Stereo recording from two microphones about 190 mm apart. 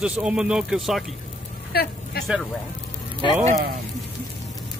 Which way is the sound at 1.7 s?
55° left (ahead or behind).